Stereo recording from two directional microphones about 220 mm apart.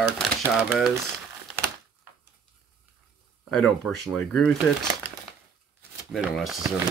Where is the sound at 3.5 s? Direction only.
Centre (ahead or behind).